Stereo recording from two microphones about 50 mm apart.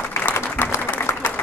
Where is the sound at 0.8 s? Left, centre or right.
Left.